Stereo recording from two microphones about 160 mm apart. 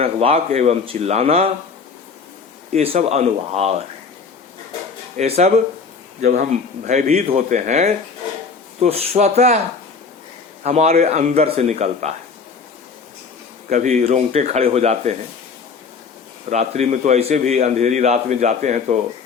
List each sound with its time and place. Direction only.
0.0 s a man's voice: 40° right (ahead or behind)
2.7 s speech: 40° right (ahead or behind)
5.1 s a man's voice: 45° right (ahead or behind)
6.2 s a man's voice: 60° right (ahead or behind); by 9.6 s 45° right (ahead or behind)
10.6 s a man's voice: 45° right (ahead or behind)
13.7 s a man's voice: 50° right (ahead or behind)
16.5 s a man's voice: 45° right (ahead or behind)